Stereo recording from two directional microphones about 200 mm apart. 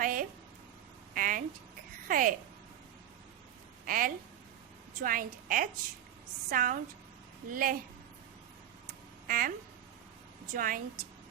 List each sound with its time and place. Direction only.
0.0 s a sound: 45° right (ahead or behind)
2.0 s a woman's voice: 45° right (ahead or behind)
3.8 s a woman's voice: 45° right (ahead or behind)
9.2 s speech: 45° right (ahead or behind)
10.5 s a woman's voice: 45° right (ahead or behind)